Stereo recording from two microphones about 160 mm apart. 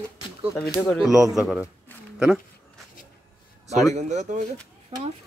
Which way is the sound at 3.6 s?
45° right (ahead or behind).